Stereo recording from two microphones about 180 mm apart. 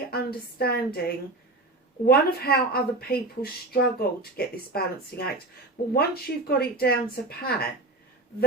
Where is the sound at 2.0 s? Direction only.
60° left (ahead or behind).